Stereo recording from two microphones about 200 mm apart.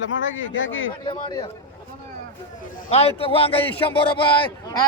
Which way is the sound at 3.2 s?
25° left (ahead or behind).